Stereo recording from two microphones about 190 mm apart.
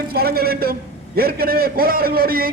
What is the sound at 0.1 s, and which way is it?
A man's voice, 55° right (ahead or behind).